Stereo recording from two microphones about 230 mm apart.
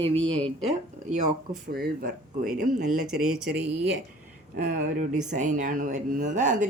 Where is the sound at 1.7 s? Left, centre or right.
Right.